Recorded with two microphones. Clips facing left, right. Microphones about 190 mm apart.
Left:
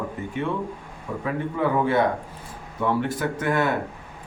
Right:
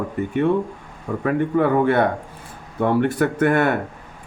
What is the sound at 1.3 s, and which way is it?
Speech, 60° right (ahead or behind).